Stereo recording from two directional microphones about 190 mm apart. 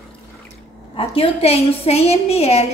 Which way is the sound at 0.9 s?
30° left (ahead or behind).